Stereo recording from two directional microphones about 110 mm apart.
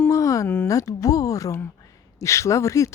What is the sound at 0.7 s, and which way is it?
Speech, 30° left (ahead or behind).